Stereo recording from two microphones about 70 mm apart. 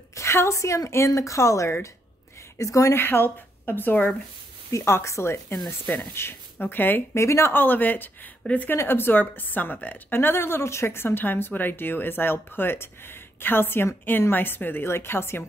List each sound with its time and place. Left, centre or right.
0.1 s a woman's voice: left
3.0 s speech: left
4.6 s a woman's voice: left
7.2 s a woman's voice: left
7.5 s a woman's voice: left